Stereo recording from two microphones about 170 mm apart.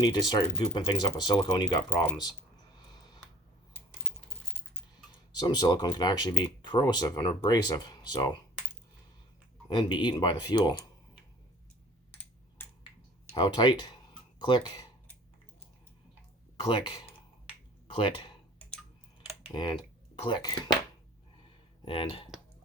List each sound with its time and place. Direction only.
0.0 s speech: 25° left (ahead or behind)
1.9 s speech: 15° left (ahead or behind)
5.4 s speech: 25° left (ahead or behind)
9.6 s speech: 25° left (ahead or behind)
13.3 s speech: 30° left (ahead or behind)
16.6 s speech: 30° left (ahead or behind)
20.2 s speech: 25° left (ahead or behind)
21.8 s speech: 30° left (ahead or behind)